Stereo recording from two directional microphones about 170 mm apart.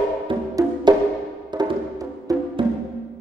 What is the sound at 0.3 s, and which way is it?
Music, 25° right (ahead or behind).